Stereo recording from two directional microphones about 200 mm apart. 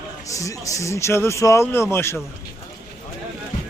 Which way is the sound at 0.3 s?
15° left (ahead or behind).